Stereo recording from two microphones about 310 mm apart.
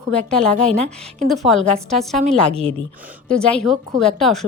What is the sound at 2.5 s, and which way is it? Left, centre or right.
Speech, centre.